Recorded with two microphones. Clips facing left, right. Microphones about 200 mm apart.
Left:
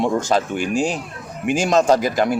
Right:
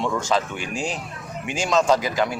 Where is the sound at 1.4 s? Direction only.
50° left (ahead or behind).